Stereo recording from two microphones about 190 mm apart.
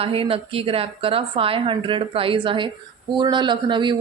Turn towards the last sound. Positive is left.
turn(degrees=-25)  # may be behind; listen again after turning